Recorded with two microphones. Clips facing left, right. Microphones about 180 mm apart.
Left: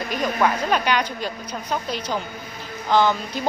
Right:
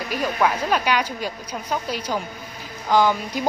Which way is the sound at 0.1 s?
5° right (ahead or behind).